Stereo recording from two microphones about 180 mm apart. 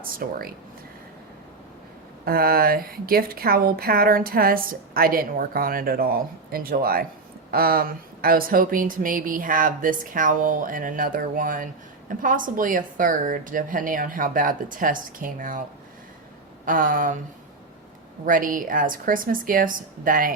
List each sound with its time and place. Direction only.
0.0 s speech: 55° right (ahead or behind)
2.2 s a woman's voice: 55° right (ahead or behind)
16.6 s speech: 50° right (ahead or behind)
18.3 s speech: 50° right (ahead or behind)